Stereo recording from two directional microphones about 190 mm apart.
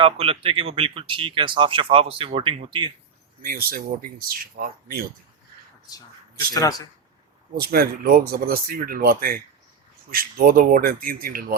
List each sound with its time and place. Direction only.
0.0 s speech: 30° right (ahead or behind)
3.4 s speech: 50° right (ahead or behind)
6.4 s speech: 20° left (ahead or behind)
7.6 s speech: 55° right (ahead or behind)